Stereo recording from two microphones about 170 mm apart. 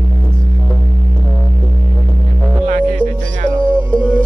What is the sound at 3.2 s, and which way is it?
Music, 45° right (ahead or behind).